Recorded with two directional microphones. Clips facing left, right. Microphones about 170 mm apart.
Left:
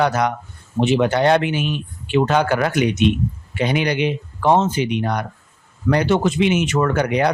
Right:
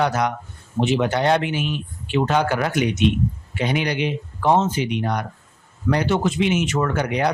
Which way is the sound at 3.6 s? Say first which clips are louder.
Left 3 dB; 70° left (ahead or behind).